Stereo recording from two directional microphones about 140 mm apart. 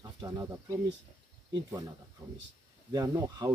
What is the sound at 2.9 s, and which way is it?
Speech, 25° right (ahead or behind).